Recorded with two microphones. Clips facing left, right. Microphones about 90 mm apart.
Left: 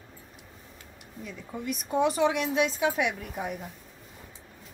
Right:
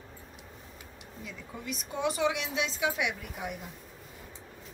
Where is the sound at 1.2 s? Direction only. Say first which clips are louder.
Left 6 dB; 45° left (ahead or behind).